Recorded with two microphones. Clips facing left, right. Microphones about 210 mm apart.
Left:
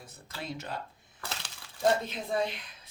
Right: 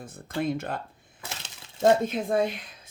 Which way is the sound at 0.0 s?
50° right (ahead or behind).